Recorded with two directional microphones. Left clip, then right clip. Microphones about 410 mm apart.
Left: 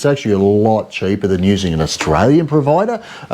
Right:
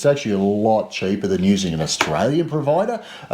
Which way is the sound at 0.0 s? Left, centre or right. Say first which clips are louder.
Left 4 dB; left.